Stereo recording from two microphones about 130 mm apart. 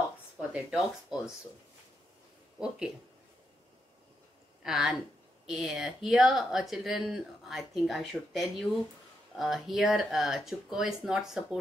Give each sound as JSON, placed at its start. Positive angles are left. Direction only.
{"t": 0.4, "sound": "speech", "side_deg": -5}
{"t": 4.6, "sound": "speech", "side_deg": -5}